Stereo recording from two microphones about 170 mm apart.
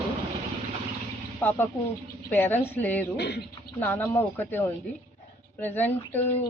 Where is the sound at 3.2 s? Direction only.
75° left (ahead or behind).